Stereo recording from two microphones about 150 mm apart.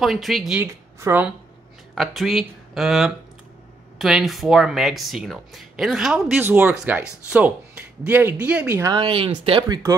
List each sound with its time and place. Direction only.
0.0 s speech: centre (ahead or behind)
0.6 s speech: 20° right (ahead or behind)
2.0 s speech: centre (ahead or behind)
8.9 s speech: 35° right (ahead or behind)